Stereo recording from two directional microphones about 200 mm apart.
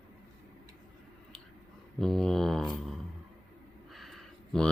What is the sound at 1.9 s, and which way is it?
Mantra, centre (ahead or behind).